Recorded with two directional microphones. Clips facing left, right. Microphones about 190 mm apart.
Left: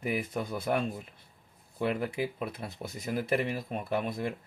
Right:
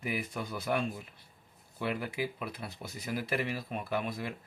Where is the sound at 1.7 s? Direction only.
30° left (ahead or behind).